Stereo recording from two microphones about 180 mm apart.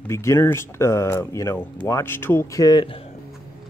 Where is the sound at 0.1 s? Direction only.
15° left (ahead or behind).